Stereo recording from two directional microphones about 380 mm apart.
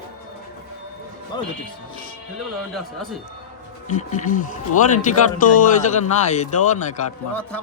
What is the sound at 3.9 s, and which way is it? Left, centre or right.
Speech, centre.